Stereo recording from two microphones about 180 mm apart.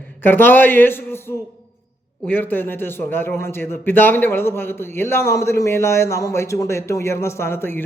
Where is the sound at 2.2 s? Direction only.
10° left (ahead or behind).